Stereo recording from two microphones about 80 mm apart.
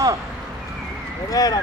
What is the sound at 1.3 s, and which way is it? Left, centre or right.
Speech, left.